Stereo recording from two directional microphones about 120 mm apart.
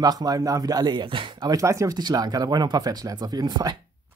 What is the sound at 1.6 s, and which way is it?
Speech, 25° right (ahead or behind).